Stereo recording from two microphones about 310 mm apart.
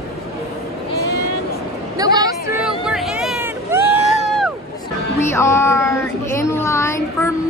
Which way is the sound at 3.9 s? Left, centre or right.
Centre.